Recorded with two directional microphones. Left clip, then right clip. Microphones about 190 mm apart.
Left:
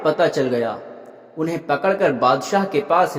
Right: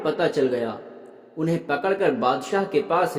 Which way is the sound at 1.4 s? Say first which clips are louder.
Left 3 dB; 20° left (ahead or behind).